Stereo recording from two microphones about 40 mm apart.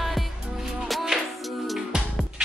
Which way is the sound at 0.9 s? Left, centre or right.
Centre.